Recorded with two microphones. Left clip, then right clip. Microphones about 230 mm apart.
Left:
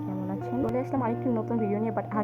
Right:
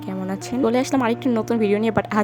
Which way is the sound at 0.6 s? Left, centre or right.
Right.